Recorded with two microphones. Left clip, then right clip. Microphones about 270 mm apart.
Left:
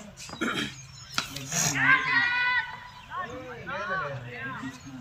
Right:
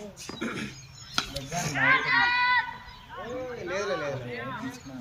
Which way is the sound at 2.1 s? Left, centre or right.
Centre.